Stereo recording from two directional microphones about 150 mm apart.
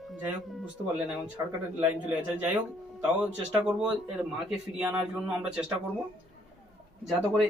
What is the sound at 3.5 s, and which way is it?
A man's voice, 5° right (ahead or behind).